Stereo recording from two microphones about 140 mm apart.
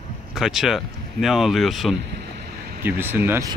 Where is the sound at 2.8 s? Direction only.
15° right (ahead or behind).